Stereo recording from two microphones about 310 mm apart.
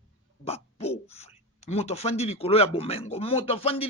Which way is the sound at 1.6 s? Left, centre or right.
Centre.